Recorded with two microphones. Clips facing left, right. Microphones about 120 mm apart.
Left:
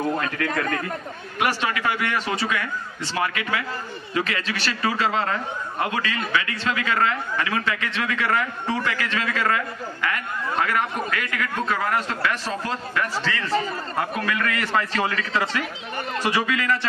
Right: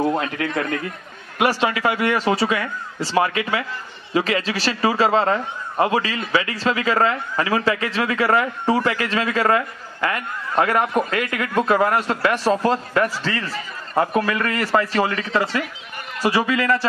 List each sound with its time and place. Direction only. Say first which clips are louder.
0.4 s a man's voice: right 1 dB; 20° right (ahead or behind)
1.4 s a man's voice: right 5 dB; 30° right (ahead or behind)